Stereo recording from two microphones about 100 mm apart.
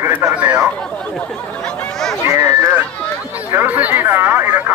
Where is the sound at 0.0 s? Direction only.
30° right (ahead or behind).